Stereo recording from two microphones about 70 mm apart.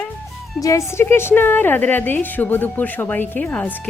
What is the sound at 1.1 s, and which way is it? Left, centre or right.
A woman's voice, left.